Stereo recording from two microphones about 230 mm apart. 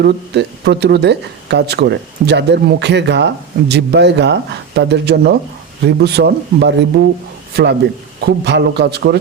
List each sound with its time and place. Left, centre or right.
0.0 s a man's voice: right